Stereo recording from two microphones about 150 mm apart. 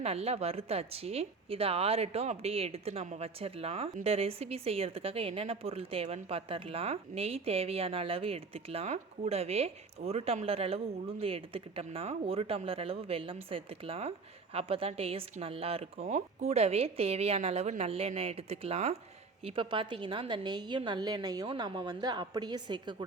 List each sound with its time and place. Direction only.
0.0 s a woman's voice: 45° right (ahead or behind)